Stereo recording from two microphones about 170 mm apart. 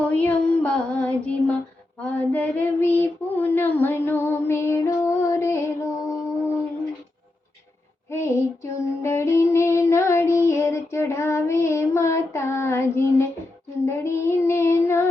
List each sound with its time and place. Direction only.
0.1 s child singing: 10° left (ahead or behind)
8.1 s female singing: 15° left (ahead or behind)
13.8 s child singing: 15° left (ahead or behind)